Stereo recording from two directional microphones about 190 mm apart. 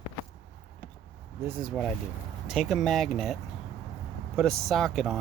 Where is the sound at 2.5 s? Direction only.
Centre (ahead or behind).